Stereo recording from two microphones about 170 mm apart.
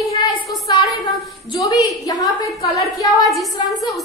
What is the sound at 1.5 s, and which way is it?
A woman's voice, 20° left (ahead or behind).